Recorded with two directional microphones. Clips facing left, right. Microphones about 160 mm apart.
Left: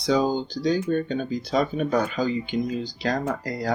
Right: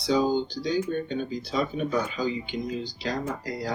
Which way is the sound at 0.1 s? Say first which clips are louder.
Left 1 dB; 50° left (ahead or behind).